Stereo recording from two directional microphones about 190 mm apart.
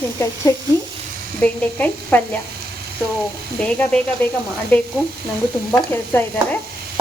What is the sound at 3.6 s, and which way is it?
Speech, 5° left (ahead or behind).